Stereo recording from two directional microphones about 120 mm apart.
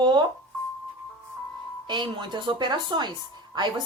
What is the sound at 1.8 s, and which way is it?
Speech, 40° right (ahead or behind).